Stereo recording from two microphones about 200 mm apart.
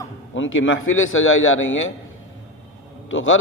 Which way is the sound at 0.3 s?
75° left (ahead or behind).